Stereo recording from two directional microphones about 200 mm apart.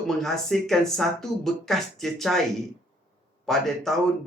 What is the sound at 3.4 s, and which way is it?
Speech, centre (ahead or behind).